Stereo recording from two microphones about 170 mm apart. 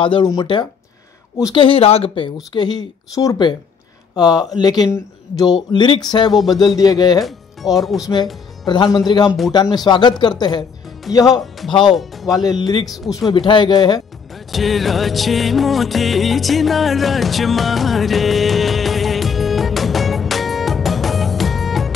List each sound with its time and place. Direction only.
0.0 s speech: 30° left (ahead or behind)
7.2 s speech: centre (ahead or behind)
8.6 s speech: 25° left (ahead or behind)
11.9 s speech: centre (ahead or behind)
12.4 s speech: 25° left (ahead or behind)
14.5 s music: centre (ahead or behind)